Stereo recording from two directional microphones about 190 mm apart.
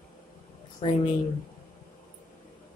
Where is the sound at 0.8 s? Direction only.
30° left (ahead or behind).